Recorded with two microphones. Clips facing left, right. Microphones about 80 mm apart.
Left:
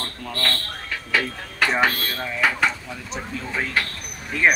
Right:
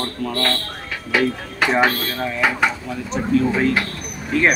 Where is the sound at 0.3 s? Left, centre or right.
Centre.